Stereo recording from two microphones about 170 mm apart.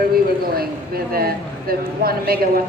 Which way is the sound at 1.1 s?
65° right (ahead or behind).